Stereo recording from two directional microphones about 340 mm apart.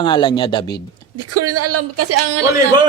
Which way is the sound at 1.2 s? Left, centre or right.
Right.